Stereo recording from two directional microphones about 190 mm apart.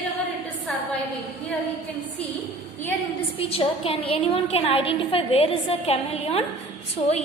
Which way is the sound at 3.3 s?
30° left (ahead or behind).